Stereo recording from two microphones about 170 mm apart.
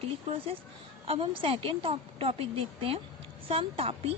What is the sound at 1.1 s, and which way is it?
A woman's voice, 35° right (ahead or behind).